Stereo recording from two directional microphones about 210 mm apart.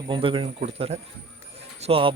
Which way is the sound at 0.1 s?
25° right (ahead or behind).